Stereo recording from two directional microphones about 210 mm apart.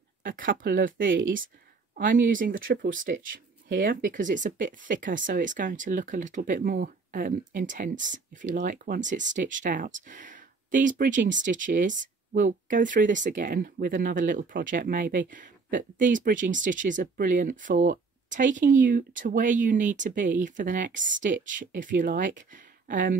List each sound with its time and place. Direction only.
0.2 s speech: 40° right (ahead or behind)